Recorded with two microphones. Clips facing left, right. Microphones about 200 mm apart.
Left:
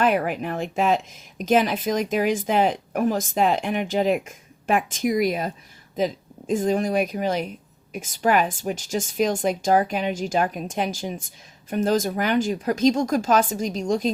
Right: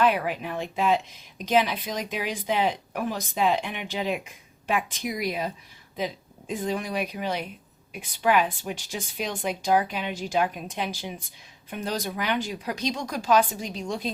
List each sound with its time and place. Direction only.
0.0 s speech: 50° left (ahead or behind)
6.5 s speech: 45° left (ahead or behind)